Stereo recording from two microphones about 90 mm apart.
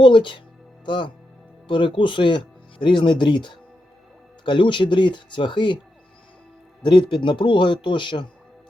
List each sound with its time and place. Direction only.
0.0 s speech: 65° left (ahead or behind)
6.8 s speech: 60° left (ahead or behind)